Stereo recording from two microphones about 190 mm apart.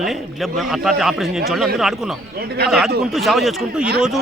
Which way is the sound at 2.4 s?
60° right (ahead or behind).